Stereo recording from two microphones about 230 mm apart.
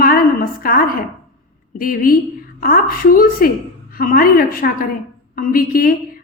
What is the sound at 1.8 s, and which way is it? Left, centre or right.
A woman's voice, left.